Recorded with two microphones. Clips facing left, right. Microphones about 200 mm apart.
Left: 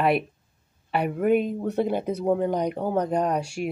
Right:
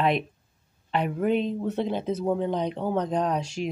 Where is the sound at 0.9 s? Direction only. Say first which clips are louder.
Left 3 dB; 10° left (ahead or behind).